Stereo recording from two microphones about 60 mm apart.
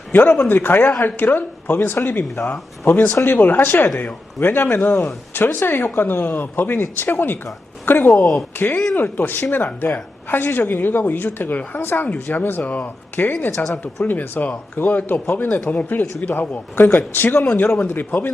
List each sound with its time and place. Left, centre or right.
0.1 s speech: left
8.2 s speech: centre
8.5 s speech: left